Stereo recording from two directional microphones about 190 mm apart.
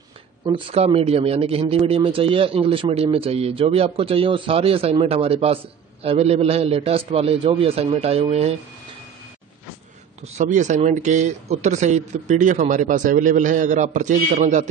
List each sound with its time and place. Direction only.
0.5 s speech: 30° right (ahead or behind)
10.2 s speech: 40° right (ahead or behind)